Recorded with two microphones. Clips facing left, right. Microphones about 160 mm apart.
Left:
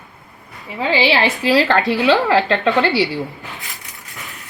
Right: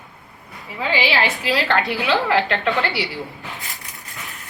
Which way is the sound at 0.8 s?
25° left (ahead or behind).